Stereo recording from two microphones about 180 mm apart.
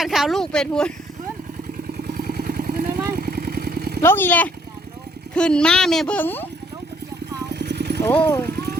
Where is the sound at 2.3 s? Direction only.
55° right (ahead or behind).